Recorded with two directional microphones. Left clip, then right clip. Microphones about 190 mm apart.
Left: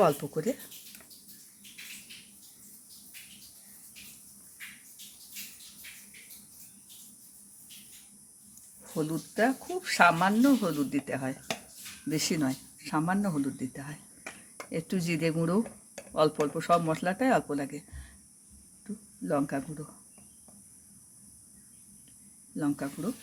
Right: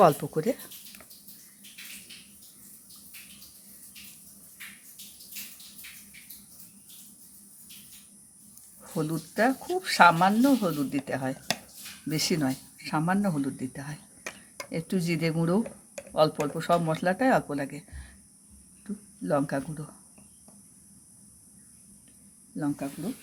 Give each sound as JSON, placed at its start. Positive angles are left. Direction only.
{"t": 0.0, "sound": "speech", "side_deg": -15}
{"t": 8.8, "sound": "speech", "side_deg": -15}
{"t": 19.2, "sound": "speech", "side_deg": -10}
{"t": 22.5, "sound": "speech", "side_deg": 0}